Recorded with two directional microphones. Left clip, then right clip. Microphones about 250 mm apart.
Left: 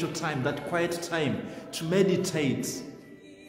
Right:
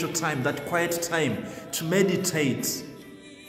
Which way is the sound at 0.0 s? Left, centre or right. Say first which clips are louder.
Right 3 dB; centre.